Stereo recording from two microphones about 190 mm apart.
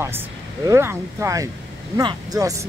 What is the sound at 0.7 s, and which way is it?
Speech, 15° right (ahead or behind).